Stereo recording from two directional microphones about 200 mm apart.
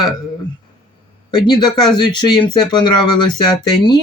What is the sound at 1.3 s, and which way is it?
Speech, 20° left (ahead or behind).